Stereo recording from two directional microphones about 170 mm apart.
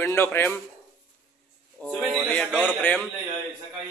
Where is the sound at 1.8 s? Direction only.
Centre (ahead or behind).